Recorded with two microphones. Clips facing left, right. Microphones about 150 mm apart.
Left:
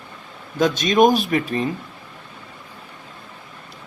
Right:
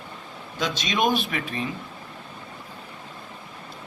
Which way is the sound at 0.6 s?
45° left (ahead or behind).